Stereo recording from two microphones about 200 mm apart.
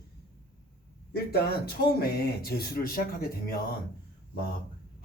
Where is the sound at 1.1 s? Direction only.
50° left (ahead or behind).